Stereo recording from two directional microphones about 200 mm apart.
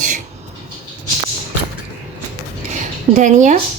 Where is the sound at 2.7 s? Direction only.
35° right (ahead or behind).